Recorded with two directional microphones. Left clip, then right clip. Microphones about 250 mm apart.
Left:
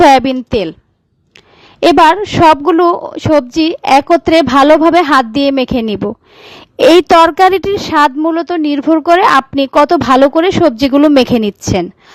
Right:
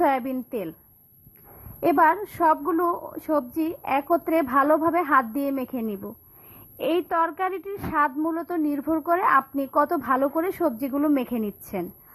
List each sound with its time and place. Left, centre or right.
0.0 s speech: left
1.8 s speech: left